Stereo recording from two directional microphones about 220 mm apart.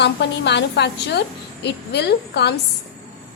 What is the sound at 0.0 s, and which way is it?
A woman's voice, 50° left (ahead or behind).